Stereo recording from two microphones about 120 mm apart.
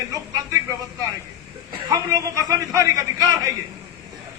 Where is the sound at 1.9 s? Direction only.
30° right (ahead or behind).